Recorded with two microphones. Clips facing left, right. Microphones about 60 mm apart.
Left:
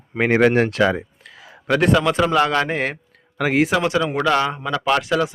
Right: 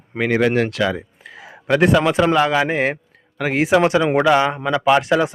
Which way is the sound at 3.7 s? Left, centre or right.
Right.